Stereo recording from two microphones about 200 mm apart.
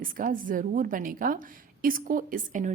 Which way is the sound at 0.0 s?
40° right (ahead or behind).